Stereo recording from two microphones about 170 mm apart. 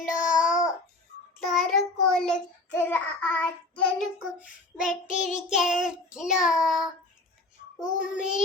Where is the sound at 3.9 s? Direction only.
5° right (ahead or behind).